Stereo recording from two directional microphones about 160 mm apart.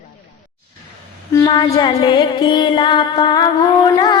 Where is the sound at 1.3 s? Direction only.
25° left (ahead or behind).